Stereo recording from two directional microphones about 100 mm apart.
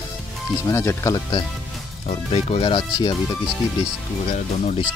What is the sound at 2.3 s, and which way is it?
Speech, 70° left (ahead or behind).